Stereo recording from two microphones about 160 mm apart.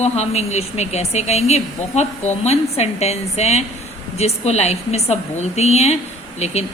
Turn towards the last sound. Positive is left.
turn(degrees=40)  # may be behind; listen again after turning